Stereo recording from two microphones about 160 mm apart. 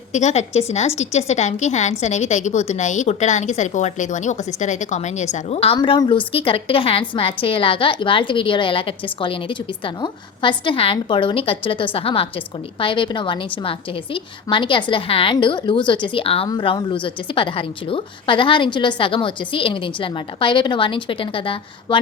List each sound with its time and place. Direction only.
0.1 s a woman's voice: 45° left (ahead or behind)